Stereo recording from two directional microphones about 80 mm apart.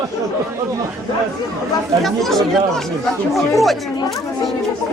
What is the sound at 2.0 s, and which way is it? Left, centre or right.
Speech, centre.